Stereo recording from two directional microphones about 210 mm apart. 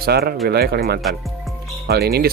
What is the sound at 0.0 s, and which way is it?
Speech, 45° right (ahead or behind).